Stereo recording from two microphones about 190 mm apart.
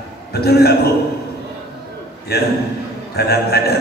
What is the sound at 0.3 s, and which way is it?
Speech, 55° left (ahead or behind).